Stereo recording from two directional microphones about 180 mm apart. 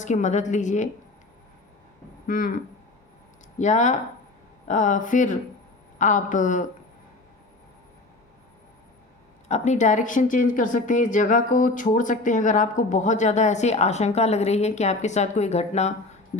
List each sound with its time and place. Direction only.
0.0 s a woman's voice: 40° left (ahead or behind)
2.2 s speech: 50° left (ahead or behind)
3.6 s a woman's voice: 40° left (ahead or behind)
9.5 s speech: 40° left (ahead or behind)